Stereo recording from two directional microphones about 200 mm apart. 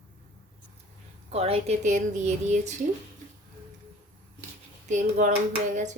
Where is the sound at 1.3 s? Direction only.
30° right (ahead or behind).